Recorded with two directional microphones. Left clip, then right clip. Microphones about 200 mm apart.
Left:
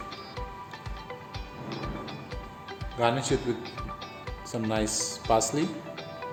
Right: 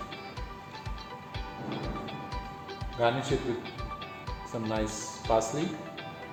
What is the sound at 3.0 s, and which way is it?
Speech, 50° left (ahead or behind).